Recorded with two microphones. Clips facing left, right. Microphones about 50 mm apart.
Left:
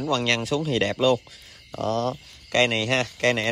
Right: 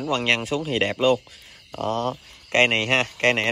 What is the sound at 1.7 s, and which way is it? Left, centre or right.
Speech, right.